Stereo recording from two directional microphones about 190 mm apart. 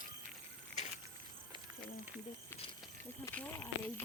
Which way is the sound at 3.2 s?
10° left (ahead or behind).